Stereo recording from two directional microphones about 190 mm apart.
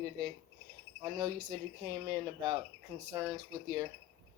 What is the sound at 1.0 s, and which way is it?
Speech, 20° right (ahead or behind).